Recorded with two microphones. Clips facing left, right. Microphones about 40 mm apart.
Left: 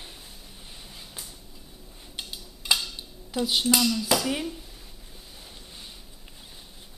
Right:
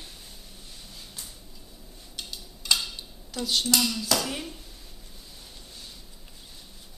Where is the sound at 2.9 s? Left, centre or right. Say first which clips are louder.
Left 5 dB; centre.